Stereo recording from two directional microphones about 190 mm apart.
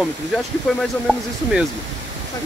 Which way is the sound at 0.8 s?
Centre (ahead or behind).